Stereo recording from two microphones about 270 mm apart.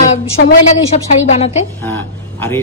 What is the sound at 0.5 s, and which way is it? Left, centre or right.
Speech, left.